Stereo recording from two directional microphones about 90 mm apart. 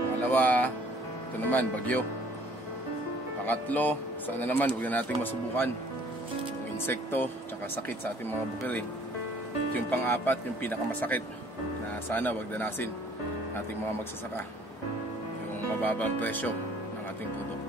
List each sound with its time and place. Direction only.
0.2 s music: 20° left (ahead or behind)
1.5 s speech: 15° left (ahead or behind)
3.4 s speech: 20° left (ahead or behind)
6.9 s speech: 25° left (ahead or behind)
9.8 s speech: 20° left (ahead or behind)
15.8 s speech: 20° left (ahead or behind)